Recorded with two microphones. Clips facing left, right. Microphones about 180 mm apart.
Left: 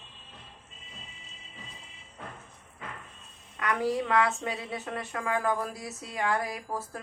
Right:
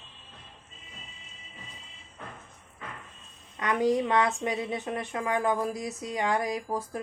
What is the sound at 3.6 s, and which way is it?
A woman's voice, 20° right (ahead or behind).